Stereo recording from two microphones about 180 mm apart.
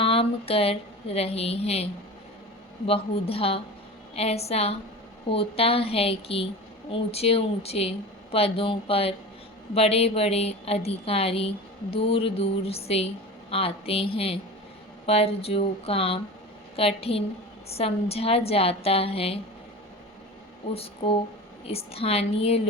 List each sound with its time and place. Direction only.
0.0 s speech: 30° left (ahead or behind)
20.7 s speech: 30° left (ahead or behind)